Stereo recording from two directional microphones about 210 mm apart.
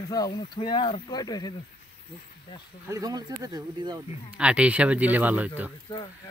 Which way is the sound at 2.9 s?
15° right (ahead or behind).